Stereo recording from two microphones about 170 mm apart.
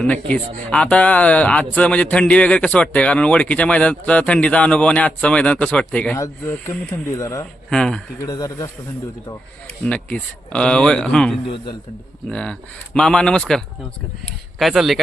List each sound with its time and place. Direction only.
0.0 s speech: 5° left (ahead or behind)
7.7 s speech: 5° left (ahead or behind)
8.2 s speech: 20° left (ahead or behind)
9.8 s speech: 5° left (ahead or behind)
11.4 s a man's voice: 30° left (ahead or behind)
12.3 s speech: 5° left (ahead or behind)
14.6 s speech: centre (ahead or behind)